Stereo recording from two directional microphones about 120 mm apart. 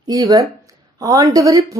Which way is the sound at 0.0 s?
30° right (ahead or behind).